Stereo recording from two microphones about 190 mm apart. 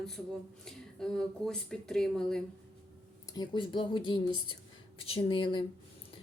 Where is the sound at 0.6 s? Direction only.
5° left (ahead or behind).